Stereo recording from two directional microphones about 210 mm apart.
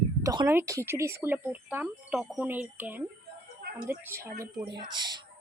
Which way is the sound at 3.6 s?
50° right (ahead or behind).